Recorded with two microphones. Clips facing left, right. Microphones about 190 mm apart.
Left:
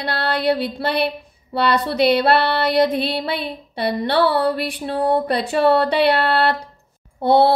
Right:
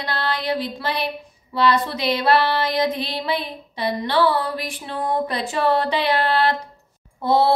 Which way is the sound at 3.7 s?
60° left (ahead or behind).